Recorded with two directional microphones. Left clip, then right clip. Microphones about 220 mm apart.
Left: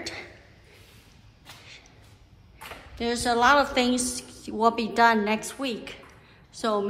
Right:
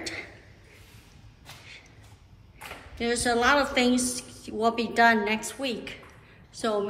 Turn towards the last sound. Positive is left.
turn(degrees=20)  # may be behind; listen again after turning